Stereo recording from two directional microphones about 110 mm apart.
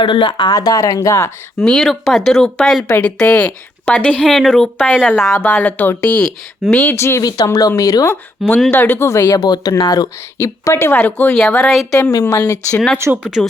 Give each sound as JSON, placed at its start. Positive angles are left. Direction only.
{"t": 0.0, "sound": "speech", "side_deg": 50}
{"t": 1.6, "sound": "speech", "side_deg": 5}
{"t": 7.3, "sound": "speech", "side_deg": 35}
{"t": 8.7, "sound": "speech", "side_deg": 15}
{"t": 9.4, "sound": "speech", "side_deg": 40}
{"t": 10.3, "sound": "speech", "side_deg": 25}
{"t": 12.3, "sound": "speech", "side_deg": 30}
{"t": 12.7, "sound": "speech", "side_deg": 5}
{"t": 13.2, "sound": "speech", "side_deg": -5}